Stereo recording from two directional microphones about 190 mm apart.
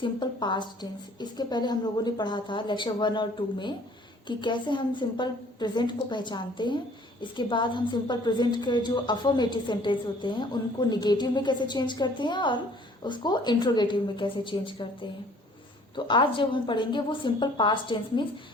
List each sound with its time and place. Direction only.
0.0 s a woman's voice: 25° left (ahead or behind)
16.0 s a woman's voice: 25° left (ahead or behind)